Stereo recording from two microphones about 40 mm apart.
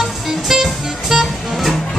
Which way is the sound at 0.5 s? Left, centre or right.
Centre.